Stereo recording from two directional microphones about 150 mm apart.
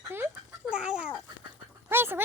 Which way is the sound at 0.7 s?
5° right (ahead or behind).